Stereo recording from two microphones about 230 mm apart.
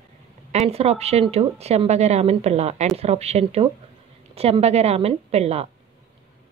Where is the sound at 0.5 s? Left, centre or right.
Right.